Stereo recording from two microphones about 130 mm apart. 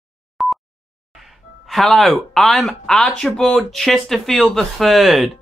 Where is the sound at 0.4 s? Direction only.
Centre (ahead or behind).